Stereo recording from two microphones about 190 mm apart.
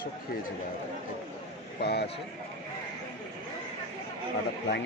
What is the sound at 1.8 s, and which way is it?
Speech, 60° left (ahead or behind).